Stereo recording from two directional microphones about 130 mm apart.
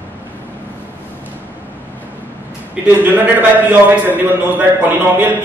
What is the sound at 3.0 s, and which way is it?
A man's voice, 15° right (ahead or behind).